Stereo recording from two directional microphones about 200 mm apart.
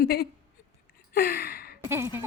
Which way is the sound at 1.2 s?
50° left (ahead or behind).